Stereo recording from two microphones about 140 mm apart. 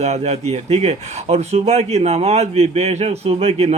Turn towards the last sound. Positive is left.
turn(degrees=-45)  # may be behind; listen again after turning